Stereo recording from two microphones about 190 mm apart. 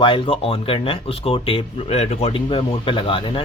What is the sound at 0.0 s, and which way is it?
A man's voice, 25° left (ahead or behind).